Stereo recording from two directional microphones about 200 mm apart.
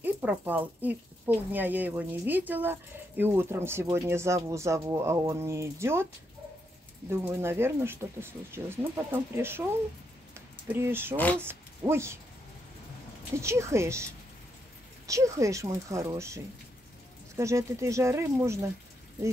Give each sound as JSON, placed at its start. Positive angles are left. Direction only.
{"t": 0.0, "sound": "speech", "side_deg": -10}
{"t": 7.1, "sound": "speech", "side_deg": -10}
{"t": 10.3, "sound": "a sound", "side_deg": -10}
{"t": 11.1, "sound": "speech", "side_deg": 5}
{"t": 11.4, "sound": "speech", "side_deg": -15}
{"t": 13.4, "sound": "speech", "side_deg": -15}
{"t": 15.0, "sound": "speech", "side_deg": -15}